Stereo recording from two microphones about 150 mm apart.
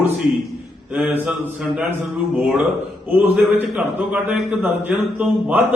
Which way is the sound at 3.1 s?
10° right (ahead or behind).